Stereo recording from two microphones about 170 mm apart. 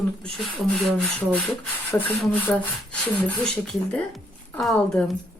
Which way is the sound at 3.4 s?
5° left (ahead or behind).